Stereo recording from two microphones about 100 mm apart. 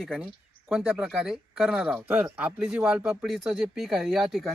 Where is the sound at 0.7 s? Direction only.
10° right (ahead or behind).